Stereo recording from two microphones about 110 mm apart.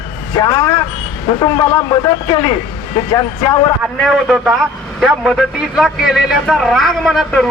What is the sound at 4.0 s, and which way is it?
A man's voice, 5° right (ahead or behind).